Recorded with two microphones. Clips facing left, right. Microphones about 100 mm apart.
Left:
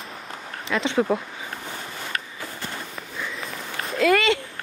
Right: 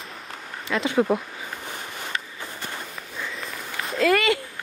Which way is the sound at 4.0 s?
25° left (ahead or behind).